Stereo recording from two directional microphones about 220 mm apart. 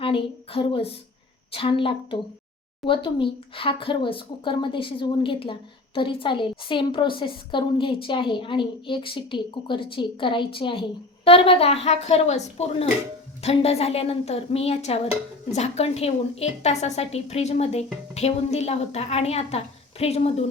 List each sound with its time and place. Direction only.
0.0 s speech: 25° left (ahead or behind)